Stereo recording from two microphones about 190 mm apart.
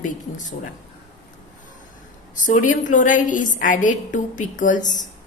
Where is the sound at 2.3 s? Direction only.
45° left (ahead or behind).